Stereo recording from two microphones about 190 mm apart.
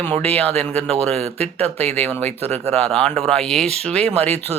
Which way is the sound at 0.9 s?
35° right (ahead or behind).